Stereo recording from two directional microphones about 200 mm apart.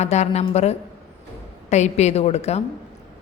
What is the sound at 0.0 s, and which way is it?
Speech, 35° left (ahead or behind).